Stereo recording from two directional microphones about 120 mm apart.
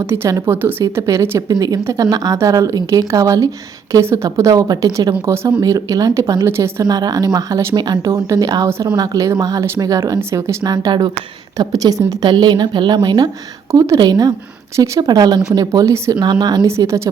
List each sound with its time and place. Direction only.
0.0 s a woman's voice: 20° right (ahead or behind)
5.5 s a woman's voice: 35° right (ahead or behind)
16.6 s a woman's voice: 25° right (ahead or behind)